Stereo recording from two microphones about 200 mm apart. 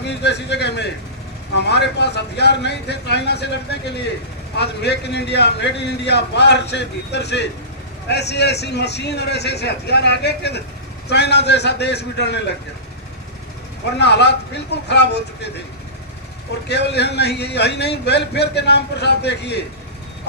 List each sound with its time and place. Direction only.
0.0 s a man's voice: 60° left (ahead or behind)
14.0 s a man's voice: 55° left (ahead or behind)
16.6 s a man's voice: 55° left (ahead or behind)